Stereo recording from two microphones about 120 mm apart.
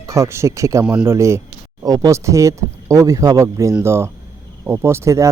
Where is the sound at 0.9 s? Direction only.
15° right (ahead or behind).